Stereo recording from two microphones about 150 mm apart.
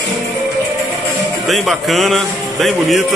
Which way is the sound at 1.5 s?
Centre (ahead or behind).